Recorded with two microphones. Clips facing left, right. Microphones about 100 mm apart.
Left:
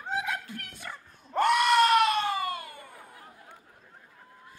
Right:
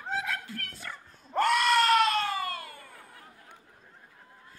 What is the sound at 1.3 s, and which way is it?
Screaming, 15° left (ahead or behind).